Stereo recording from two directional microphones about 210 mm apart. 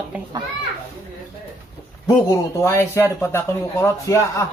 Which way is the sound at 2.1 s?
15° left (ahead or behind).